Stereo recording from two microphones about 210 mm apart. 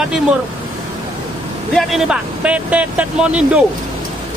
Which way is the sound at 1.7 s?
Centre (ahead or behind).